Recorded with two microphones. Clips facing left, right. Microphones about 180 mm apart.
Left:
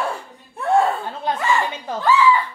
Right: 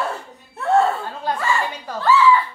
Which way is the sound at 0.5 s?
15° left (ahead or behind).